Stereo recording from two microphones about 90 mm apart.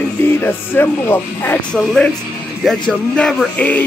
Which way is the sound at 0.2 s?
25° left (ahead or behind).